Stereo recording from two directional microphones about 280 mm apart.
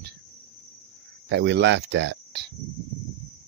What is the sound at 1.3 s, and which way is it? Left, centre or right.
Speech, right.